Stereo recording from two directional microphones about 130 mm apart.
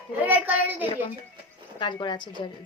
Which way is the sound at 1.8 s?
35° left (ahead or behind).